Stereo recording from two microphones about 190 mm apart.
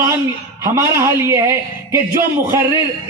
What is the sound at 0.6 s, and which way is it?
A man's voice, 15° right (ahead or behind).